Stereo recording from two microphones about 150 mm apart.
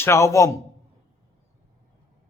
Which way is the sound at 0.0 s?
20° left (ahead or behind).